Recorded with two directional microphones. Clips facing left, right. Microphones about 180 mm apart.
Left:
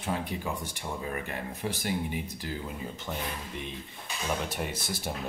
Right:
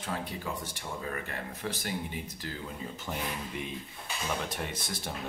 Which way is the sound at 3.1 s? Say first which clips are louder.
Even; 10° right (ahead or behind).